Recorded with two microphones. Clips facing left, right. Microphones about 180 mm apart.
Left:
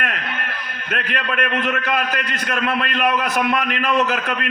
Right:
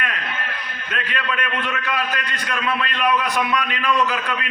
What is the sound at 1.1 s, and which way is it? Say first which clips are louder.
A man's voice: left 3 dB; 50° left (ahead or behind).